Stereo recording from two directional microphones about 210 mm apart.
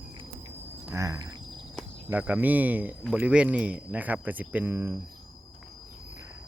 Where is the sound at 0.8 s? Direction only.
15° right (ahead or behind).